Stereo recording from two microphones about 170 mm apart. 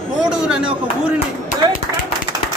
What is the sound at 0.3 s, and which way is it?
Speech, 5° right (ahead or behind).